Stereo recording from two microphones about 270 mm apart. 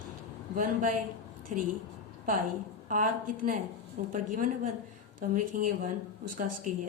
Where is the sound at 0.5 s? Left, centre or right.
Right.